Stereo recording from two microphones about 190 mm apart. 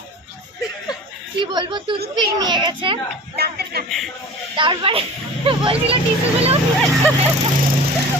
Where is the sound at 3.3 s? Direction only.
55° right (ahead or behind).